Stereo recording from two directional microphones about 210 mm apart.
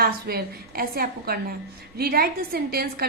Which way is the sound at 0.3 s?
45° right (ahead or behind).